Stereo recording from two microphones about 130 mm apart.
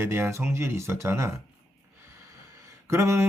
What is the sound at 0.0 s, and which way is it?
Speech, 20° right (ahead or behind).